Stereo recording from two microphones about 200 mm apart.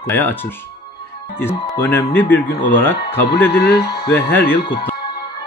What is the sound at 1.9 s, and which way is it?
Speech, 10° left (ahead or behind).